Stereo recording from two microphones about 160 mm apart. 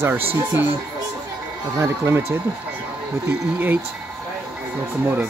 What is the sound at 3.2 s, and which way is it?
Speech, 10° right (ahead or behind).